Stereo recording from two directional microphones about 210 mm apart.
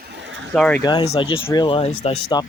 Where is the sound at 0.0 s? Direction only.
55° right (ahead or behind).